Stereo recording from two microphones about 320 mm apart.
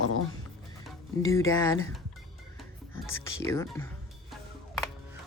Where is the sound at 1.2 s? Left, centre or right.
Centre.